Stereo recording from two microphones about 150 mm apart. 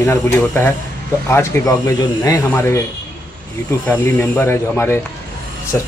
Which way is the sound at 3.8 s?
15° left (ahead or behind).